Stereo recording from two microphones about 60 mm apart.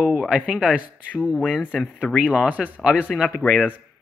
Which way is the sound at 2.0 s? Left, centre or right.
Centre.